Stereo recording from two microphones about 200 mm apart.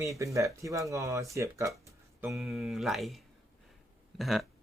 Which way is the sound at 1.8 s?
15° right (ahead or behind).